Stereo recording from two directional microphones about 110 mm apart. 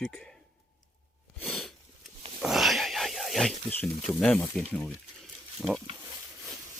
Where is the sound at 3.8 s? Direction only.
10° left (ahead or behind).